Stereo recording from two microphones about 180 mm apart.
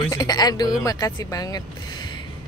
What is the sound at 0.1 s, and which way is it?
Speech, 20° left (ahead or behind).